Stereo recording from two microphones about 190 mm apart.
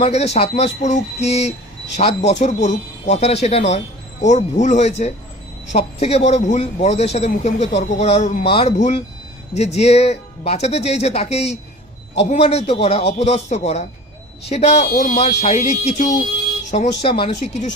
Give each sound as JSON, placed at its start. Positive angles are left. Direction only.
{"t": 0.0, "sound": "a man's voice", "side_deg": 35}